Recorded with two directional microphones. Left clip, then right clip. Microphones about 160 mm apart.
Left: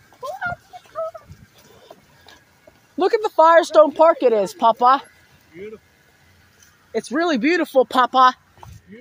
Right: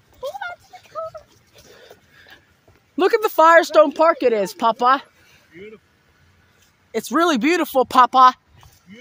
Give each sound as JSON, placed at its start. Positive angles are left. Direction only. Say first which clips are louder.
{"t": 0.7, "sound": "a sound", "louder": "left 2 dB", "side_deg": -20}
{"t": 3.2, "sound": "speech", "louder": "right 1 dB", "side_deg": -50}
{"t": 3.6, "sound": "speech", "louder": "left 1 dB", "side_deg": -30}
{"t": 5.5, "sound": "speech", "louder": "left 4 dB", "side_deg": 5}
{"t": 6.9, "sound": "speech", "louder": "right 2 dB", "side_deg": -20}